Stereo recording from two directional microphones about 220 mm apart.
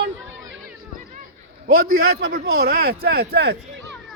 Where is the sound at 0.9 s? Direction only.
40° right (ahead or behind).